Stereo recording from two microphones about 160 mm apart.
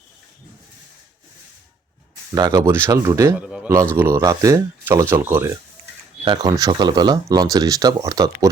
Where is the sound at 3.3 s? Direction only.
5° right (ahead or behind).